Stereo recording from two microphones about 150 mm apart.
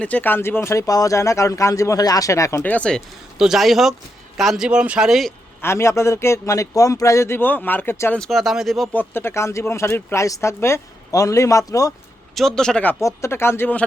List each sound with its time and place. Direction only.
0.0 s speech: 10° left (ahead or behind)
3.3 s speech: 5° right (ahead or behind)
5.6 s a man's voice: 20° left (ahead or behind)
8.2 s speech: centre (ahead or behind)
8.9 s speech: 15° left (ahead or behind)
12.3 s a man's voice: centre (ahead or behind)